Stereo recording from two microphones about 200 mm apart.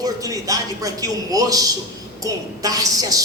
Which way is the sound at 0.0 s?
15° right (ahead or behind).